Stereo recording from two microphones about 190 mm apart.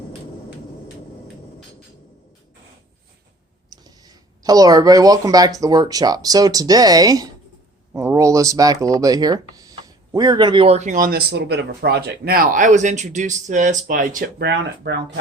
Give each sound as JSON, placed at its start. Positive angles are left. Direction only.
{"t": 3.7, "sound": "speech", "side_deg": -20}